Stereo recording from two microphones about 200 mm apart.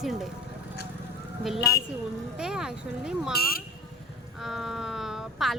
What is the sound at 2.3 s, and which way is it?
Speech, 5° right (ahead or behind).